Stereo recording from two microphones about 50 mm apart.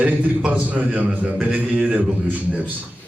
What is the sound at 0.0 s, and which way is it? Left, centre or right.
A man's voice, right.